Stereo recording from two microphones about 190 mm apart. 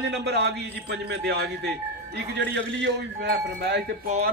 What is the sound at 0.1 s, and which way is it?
A man's voice, 60° right (ahead or behind).